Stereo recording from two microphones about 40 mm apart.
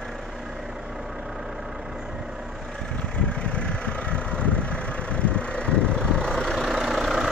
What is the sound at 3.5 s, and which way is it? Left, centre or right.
Vehicle, left.